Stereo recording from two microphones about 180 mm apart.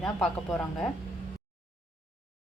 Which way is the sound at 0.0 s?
Centre (ahead or behind).